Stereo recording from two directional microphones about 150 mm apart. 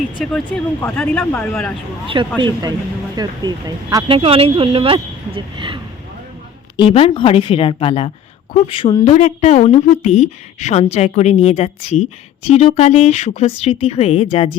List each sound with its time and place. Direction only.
0.3 s speech: 10° left (ahead or behind)
2.4 s speech: 25° right (ahead or behind)
4.1 s speech: 40° right (ahead or behind)
6.7 s a woman's voice: 35° left (ahead or behind)
9.1 s a woman's voice: 45° left (ahead or behind)